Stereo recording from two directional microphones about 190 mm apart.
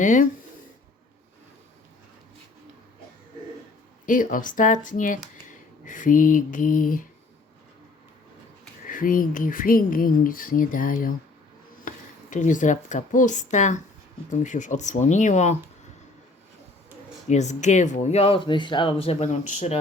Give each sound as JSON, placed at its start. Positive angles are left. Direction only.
{"t": 0.0, "sound": "speech", "side_deg": 40}
{"t": 4.0, "sound": "speech", "side_deg": 45}
{"t": 8.9, "sound": "speech", "side_deg": 45}
{"t": 17.2, "sound": "speech", "side_deg": 35}